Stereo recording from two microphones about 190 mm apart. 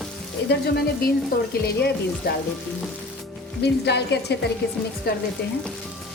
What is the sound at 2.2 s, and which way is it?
Frying, 55° left (ahead or behind).